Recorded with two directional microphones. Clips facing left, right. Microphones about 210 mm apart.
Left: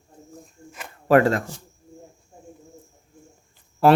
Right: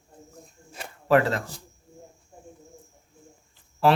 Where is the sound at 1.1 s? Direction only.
45° left (ahead or behind).